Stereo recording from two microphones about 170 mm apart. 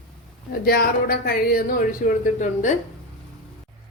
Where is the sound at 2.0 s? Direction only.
50° left (ahead or behind).